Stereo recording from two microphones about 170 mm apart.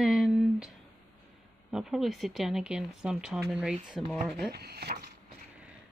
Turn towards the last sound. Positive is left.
turn(degrees=-70)  # may be behind; listen again after turning